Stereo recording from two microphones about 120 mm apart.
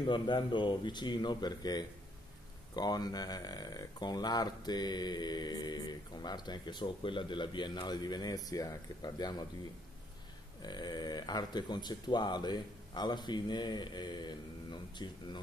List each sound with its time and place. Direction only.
0.0 s speech: 40° left (ahead or behind)
10.6 s speech: 35° left (ahead or behind)